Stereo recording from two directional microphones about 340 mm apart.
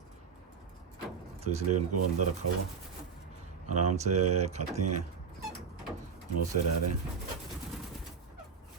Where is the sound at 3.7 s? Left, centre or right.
Right.